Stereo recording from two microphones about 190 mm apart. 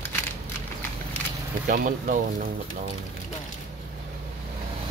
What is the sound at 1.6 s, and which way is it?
Speech, 45° right (ahead or behind).